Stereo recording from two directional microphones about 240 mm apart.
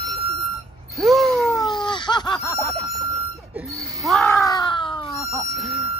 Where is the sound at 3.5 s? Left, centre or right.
Centre.